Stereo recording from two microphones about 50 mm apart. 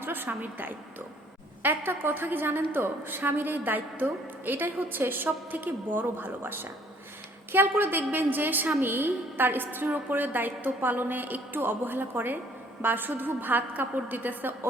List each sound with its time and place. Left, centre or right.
0.0 s a woman's voice: right